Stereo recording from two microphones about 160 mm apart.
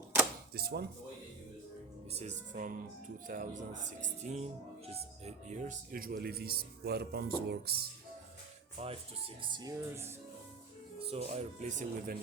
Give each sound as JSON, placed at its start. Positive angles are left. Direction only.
{"t": 0.5, "sound": "speech", "side_deg": -85}
{"t": 2.1, "sound": "speech", "side_deg": -45}
{"t": 8.8, "sound": "speech", "side_deg": -40}
{"t": 9.4, "sound": "speech", "side_deg": -25}
{"t": 11.0, "sound": "speech", "side_deg": -40}